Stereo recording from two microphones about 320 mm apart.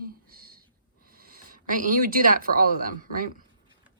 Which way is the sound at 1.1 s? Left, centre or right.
Right.